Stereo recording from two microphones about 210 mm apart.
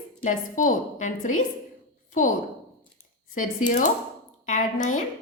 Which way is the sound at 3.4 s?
40° left (ahead or behind).